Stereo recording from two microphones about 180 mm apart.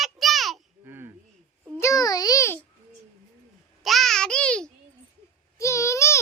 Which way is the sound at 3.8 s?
Centre (ahead or behind).